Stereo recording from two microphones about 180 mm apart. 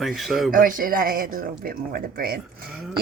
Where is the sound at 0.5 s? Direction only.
50° right (ahead or behind).